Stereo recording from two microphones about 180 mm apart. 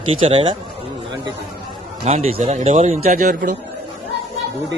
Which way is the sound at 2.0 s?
35° right (ahead or behind).